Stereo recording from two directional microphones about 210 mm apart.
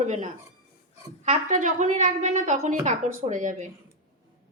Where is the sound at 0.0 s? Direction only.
35° right (ahead or behind).